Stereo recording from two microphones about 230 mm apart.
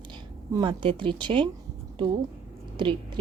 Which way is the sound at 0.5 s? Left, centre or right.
Centre.